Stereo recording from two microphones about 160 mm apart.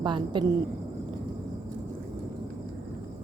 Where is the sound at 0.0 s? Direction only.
30° right (ahead or behind).